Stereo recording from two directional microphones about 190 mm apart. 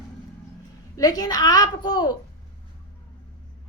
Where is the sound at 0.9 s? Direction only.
20° left (ahead or behind).